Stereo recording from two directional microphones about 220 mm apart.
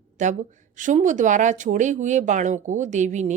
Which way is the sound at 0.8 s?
35° right (ahead or behind).